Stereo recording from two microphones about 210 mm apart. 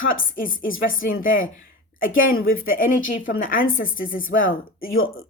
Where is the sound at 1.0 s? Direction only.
40° left (ahead or behind).